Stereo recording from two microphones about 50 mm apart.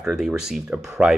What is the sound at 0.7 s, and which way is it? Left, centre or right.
Speech, centre.